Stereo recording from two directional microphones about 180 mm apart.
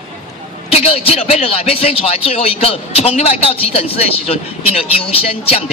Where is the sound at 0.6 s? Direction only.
35° left (ahead or behind).